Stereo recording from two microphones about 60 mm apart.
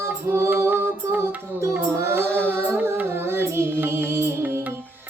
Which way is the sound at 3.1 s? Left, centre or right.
Right.